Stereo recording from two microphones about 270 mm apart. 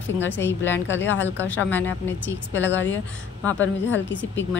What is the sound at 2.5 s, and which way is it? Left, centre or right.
A woman's voice, left.